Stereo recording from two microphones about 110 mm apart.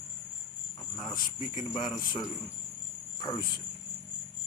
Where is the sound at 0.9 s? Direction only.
40° left (ahead or behind).